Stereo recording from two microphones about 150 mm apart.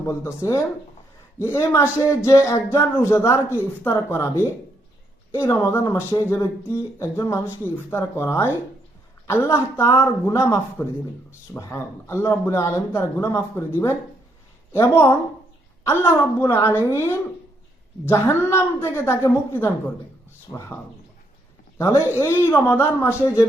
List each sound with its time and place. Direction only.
0.1 s a man's voice: 20° left (ahead or behind)
16.4 s speech: 15° left (ahead or behind)
21.8 s speech: 20° left (ahead or behind)